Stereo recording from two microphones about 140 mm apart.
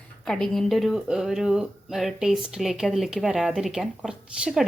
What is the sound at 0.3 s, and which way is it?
Speech, 5° left (ahead or behind).